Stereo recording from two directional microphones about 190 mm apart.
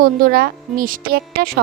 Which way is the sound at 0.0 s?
50° right (ahead or behind).